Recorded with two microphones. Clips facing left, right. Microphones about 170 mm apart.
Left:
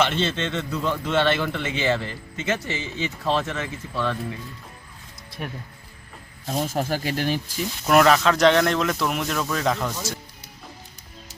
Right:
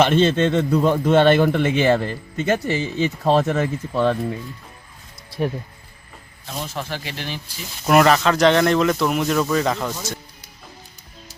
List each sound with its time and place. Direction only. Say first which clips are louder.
0.0 s a man's voice: right 7 dB; 50° right (ahead or behind)
6.4 s speech: left 4 dB; 40° left (ahead or behind)
7.9 s speech: right 2 dB; centre (ahead or behind)